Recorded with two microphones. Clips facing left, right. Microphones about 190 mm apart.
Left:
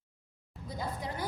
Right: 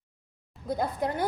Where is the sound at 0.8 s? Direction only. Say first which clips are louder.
Right 8 dB; 60° right (ahead or behind).